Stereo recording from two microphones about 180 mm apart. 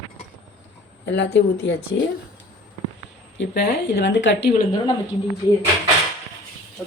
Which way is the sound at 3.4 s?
65° left (ahead or behind).